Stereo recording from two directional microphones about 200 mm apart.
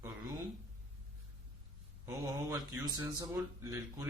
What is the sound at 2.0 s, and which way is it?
A man's voice, 15° right (ahead or behind).